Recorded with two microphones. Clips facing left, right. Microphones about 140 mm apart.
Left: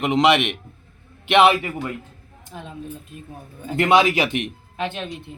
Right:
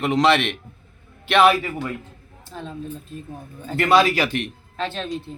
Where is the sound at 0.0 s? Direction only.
20° left (ahead or behind).